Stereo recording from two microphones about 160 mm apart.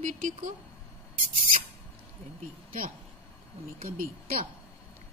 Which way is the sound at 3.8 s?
65° right (ahead or behind).